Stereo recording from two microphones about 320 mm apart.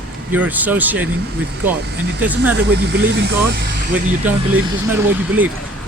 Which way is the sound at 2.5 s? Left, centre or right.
Right.